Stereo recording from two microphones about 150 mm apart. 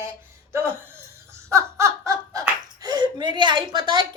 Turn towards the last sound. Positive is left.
turn(degrees=-30)  # may be behind; listen again after turning